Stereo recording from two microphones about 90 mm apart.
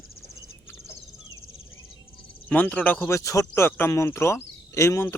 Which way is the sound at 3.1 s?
40° left (ahead or behind).